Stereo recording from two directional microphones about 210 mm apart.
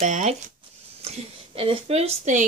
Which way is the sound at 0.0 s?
35° right (ahead or behind).